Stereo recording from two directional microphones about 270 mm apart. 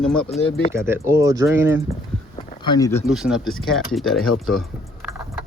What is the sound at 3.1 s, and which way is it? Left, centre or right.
Speech, centre.